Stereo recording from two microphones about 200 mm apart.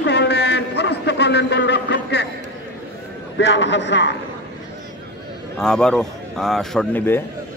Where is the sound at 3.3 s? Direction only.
65° left (ahead or behind).